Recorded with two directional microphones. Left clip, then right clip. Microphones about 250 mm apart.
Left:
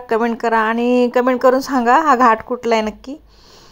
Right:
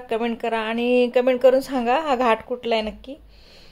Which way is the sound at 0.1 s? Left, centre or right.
Centre.